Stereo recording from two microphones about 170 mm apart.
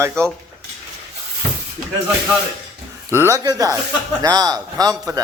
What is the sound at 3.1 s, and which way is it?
A man's voice, 15° right (ahead or behind).